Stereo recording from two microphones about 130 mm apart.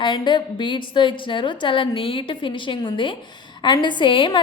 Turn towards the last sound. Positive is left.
turn(degrees=40)  # may be behind; listen again after turning